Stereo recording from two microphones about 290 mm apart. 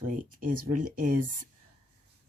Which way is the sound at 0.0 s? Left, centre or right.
Right.